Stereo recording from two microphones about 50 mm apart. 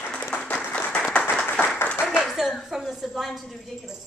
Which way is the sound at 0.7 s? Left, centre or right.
Left.